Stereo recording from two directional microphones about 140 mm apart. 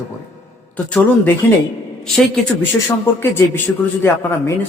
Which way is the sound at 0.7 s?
10° left (ahead or behind).